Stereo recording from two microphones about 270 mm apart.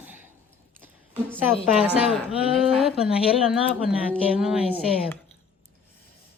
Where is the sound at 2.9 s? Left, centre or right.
Centre.